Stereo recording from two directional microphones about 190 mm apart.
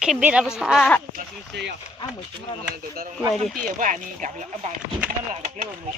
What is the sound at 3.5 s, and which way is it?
Speech, 45° right (ahead or behind).